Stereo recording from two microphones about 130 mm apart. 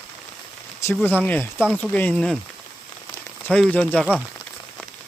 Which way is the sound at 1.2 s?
10° left (ahead or behind).